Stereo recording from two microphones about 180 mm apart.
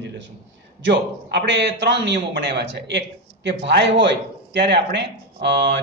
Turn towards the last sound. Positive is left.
turn(degrees=-70)  # may be behind; listen again after turning